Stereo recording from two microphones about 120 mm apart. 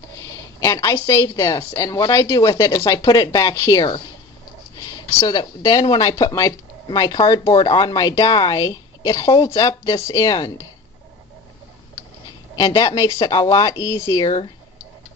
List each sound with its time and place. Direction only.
0.2 s speech: 25° left (ahead or behind)
4.7 s a sound: 30° left (ahead or behind)
5.4 s speech: 35° left (ahead or behind)
12.5 s speech: 30° left (ahead or behind)